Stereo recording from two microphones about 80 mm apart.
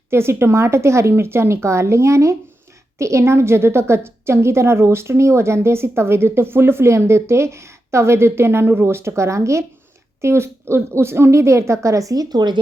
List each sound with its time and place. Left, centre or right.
0.1 s a woman's voice: right